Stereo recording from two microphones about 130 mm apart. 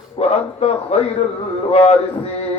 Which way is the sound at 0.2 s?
50° left (ahead or behind).